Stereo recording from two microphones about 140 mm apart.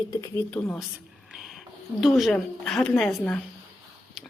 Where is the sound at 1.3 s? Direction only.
Centre (ahead or behind).